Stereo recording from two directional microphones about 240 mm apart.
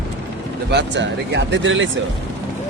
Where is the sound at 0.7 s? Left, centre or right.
Right.